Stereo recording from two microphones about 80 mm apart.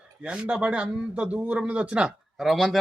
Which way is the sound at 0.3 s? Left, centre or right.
Centre.